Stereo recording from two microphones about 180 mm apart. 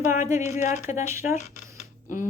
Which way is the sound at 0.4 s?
40° left (ahead or behind).